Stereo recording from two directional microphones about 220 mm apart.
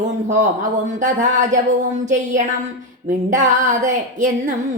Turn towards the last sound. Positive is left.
turn(degrees=-35)  # may be behind; listen again after turning